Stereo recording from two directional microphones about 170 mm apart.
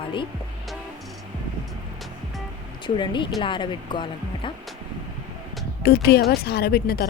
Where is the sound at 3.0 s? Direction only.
30° left (ahead or behind).